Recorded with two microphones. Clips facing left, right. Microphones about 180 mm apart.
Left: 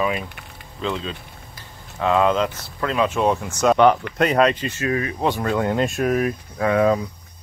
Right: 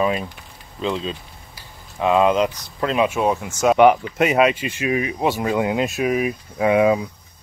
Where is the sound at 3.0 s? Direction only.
5° right (ahead or behind).